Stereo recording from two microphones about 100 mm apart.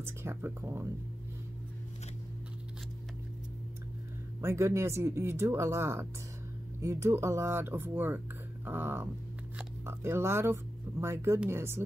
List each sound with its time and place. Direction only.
0.0 s speech: 25° right (ahead or behind)
4.4 s speech: 25° right (ahead or behind)